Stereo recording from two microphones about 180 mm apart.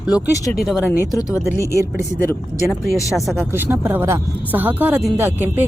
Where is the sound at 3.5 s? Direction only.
15° right (ahead or behind).